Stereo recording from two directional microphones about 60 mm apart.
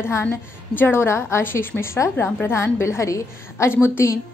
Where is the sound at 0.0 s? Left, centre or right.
Left.